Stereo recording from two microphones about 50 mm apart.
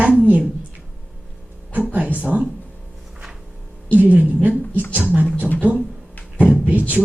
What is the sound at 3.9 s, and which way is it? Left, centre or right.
Speech, right.